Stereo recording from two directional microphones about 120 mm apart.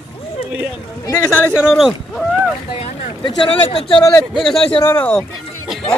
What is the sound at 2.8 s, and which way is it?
Speech, 50° left (ahead or behind).